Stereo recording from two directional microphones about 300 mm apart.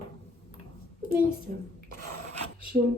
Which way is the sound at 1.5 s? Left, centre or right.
Right.